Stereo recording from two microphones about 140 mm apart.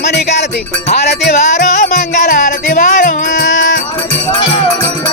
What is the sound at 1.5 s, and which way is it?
Music, 60° left (ahead or behind).